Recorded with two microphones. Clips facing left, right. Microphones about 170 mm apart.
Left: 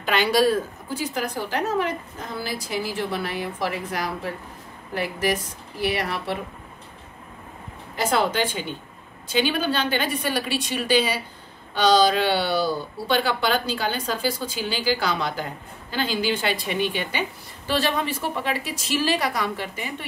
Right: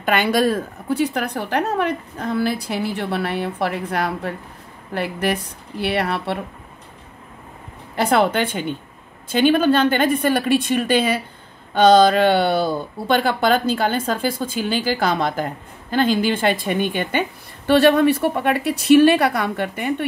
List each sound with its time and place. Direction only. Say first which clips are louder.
0.0 s a woman's voice: right 2 dB; 55° right (ahead or behind)
7.9 s a woman's voice: right 5 dB; 60° right (ahead or behind)